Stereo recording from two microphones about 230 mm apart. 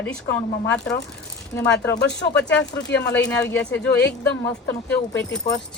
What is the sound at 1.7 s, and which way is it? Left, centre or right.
Speech, centre.